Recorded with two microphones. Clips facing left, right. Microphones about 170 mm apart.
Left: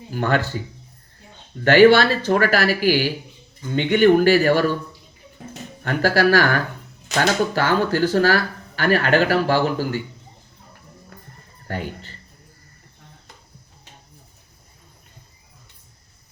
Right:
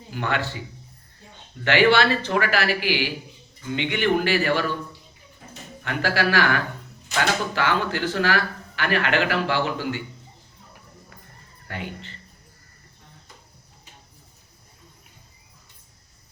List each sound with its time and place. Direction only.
0.1 s speech: 40° left (ahead or behind)
1.6 s speech: 40° left (ahead or behind)
5.8 s speech: 45° left (ahead or behind)
11.7 s speech: 40° left (ahead or behind)